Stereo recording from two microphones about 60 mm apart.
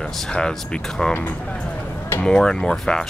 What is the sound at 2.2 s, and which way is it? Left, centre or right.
Speech, centre.